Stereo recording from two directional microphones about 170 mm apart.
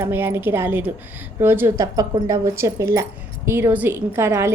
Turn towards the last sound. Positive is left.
turn(degrees=-15)  # may be behind; listen again after turning